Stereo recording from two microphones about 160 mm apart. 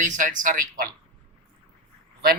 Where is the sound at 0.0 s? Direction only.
55° right (ahead or behind).